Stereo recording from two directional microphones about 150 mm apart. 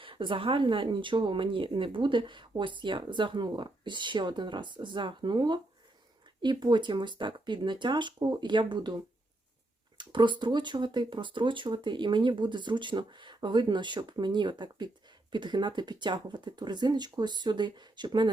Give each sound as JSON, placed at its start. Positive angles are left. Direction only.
{"t": 0.0, "sound": "speech", "side_deg": -35}
{"t": 10.0, "sound": "speech", "side_deg": -30}